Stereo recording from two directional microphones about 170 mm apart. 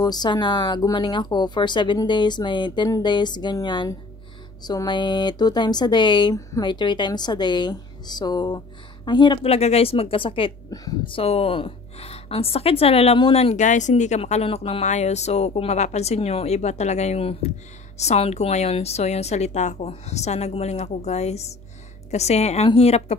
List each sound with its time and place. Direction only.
0.0 s a woman's voice: 25° left (ahead or behind)